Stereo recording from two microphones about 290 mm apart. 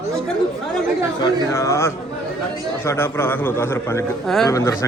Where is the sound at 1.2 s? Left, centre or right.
Centre.